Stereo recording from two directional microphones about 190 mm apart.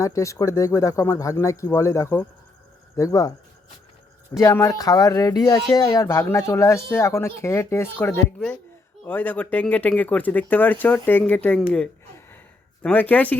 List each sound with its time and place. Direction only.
0.0 s speech: 15° left (ahead or behind)
4.4 s speech: 15° left (ahead or behind)
12.8 s speech: 10° left (ahead or behind)